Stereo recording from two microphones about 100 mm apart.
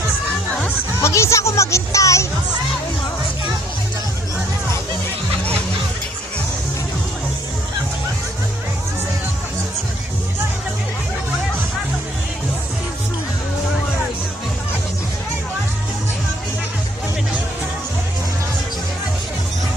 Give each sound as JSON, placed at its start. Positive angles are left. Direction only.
{"t": 1.0, "sound": "music", "side_deg": 30}